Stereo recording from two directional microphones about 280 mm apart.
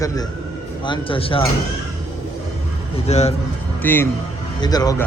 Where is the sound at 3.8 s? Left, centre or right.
Centre.